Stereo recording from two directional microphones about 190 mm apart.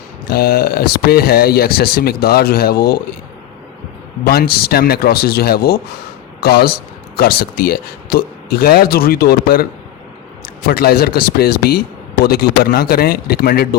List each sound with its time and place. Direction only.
0.3 s speech: 55° left (ahead or behind)
4.2 s speech: 55° left (ahead or behind)
10.7 s speech: 55° left (ahead or behind)